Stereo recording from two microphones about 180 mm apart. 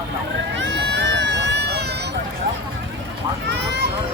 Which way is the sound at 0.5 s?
85° right.